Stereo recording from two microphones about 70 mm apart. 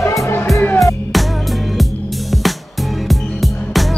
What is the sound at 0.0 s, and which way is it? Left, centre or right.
Music, left.